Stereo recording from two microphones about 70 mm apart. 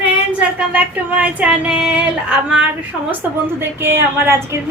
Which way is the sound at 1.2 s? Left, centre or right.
Centre.